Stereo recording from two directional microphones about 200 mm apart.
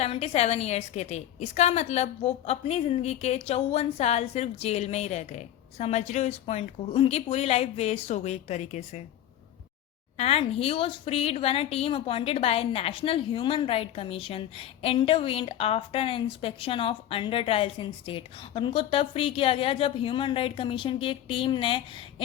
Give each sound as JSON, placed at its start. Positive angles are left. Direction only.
{"t": 0.0, "sound": "a woman's voice", "side_deg": 30}
{"t": 10.2, "sound": "a woman's voice", "side_deg": 30}